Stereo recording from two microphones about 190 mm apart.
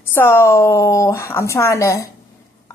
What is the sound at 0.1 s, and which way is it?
A woman's voice, 15° left (ahead or behind).